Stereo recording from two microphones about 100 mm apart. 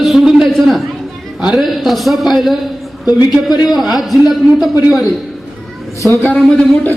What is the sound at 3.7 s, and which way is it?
A man's voice, centre (ahead or behind).